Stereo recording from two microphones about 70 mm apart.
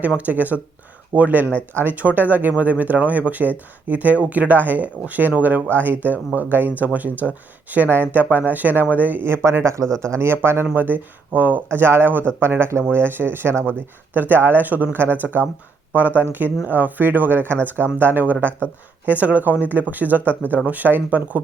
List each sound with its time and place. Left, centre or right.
0.0 s speech: right
9.8 s speech: centre
10.1 s speech: right
16.6 s speech: right